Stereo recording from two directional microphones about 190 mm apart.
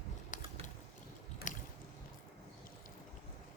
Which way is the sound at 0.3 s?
40° left (ahead or behind).